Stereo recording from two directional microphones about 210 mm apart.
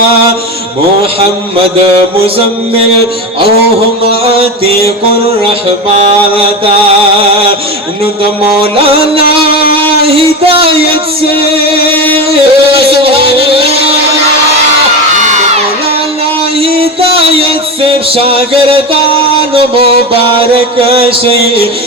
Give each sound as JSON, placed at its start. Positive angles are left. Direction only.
{"t": 4.0, "sound": "mantra", "side_deg": -25}
{"t": 8.7, "sound": "music", "side_deg": -25}
{"t": 9.3, "sound": "a sound", "side_deg": -25}
{"t": 10.1, "sound": "music", "side_deg": -25}
{"t": 16.6, "sound": "music", "side_deg": -25}